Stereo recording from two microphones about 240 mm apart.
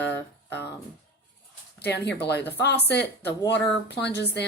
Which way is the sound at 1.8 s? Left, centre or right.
Left.